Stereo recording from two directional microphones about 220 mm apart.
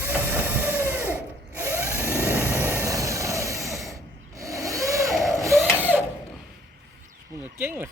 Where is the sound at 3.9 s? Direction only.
15° right (ahead or behind).